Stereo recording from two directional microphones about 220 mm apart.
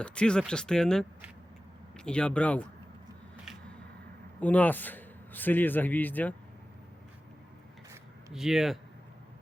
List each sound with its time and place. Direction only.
0.0 s speech: 5° left (ahead or behind)
4.4 s a man's voice: 5° left (ahead or behind)
8.3 s speech: centre (ahead or behind)